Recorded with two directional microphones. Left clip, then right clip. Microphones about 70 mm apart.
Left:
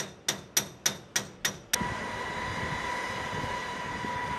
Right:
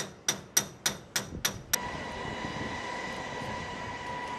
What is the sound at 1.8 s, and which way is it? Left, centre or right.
Train, left.